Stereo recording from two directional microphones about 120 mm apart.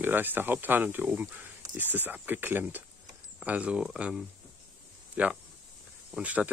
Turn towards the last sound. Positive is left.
turn(degrees=-10)  # may be behind; listen again after turning